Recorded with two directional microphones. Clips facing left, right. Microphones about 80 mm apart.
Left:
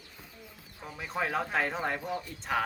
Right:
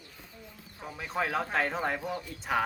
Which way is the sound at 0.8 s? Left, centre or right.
Centre.